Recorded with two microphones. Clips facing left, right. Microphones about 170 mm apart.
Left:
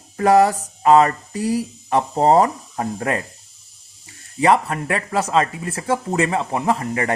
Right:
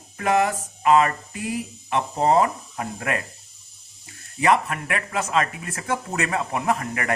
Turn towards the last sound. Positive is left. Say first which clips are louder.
# left 4 dB
turn(degrees=30)  # may be behind; listen again after turning